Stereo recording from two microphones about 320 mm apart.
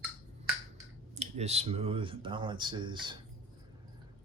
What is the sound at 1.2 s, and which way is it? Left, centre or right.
Speech, centre.